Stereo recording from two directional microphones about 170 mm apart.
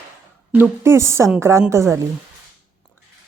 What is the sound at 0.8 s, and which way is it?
A woman's voice, 15° right (ahead or behind).